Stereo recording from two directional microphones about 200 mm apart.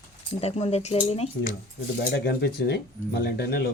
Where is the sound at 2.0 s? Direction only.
55° left (ahead or behind).